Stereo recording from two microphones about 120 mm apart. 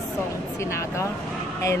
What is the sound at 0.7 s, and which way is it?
Speech, 25° left (ahead or behind).